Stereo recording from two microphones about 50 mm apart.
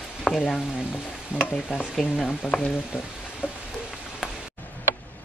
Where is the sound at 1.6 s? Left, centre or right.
Centre.